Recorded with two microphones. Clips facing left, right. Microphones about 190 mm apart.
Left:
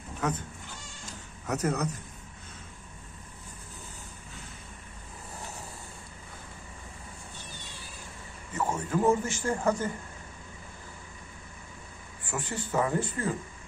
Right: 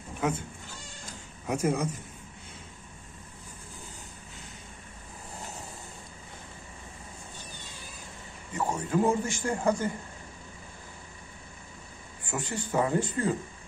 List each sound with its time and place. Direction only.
0.2 s speech: 10° right (ahead or behind)
8.5 s a sound: 15° right (ahead or behind)
9.5 s speech: 15° right (ahead or behind)
12.3 s speech: 15° right (ahead or behind)